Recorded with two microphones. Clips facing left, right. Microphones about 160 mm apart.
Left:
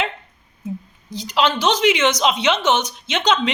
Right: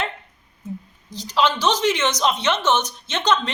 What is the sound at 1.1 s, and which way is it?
A woman's voice, 15° left (ahead or behind).